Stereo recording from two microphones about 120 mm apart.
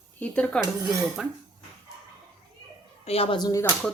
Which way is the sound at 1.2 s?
5° right (ahead or behind).